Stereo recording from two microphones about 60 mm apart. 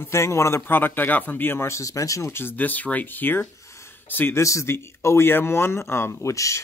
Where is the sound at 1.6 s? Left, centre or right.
Left.